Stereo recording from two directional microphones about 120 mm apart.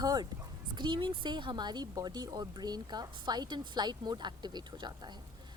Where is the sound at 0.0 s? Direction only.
35° right (ahead or behind).